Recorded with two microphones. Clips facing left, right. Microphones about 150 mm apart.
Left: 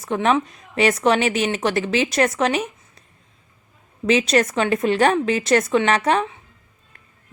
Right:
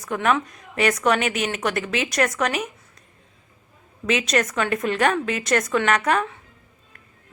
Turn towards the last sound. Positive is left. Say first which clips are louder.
# left 3 dB
turn(degrees=30)  # may be behind; listen again after turning